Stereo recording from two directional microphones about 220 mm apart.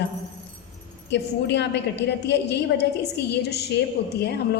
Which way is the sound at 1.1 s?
50° left (ahead or behind).